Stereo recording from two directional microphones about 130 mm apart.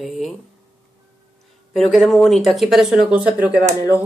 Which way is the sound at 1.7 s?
Centre (ahead or behind).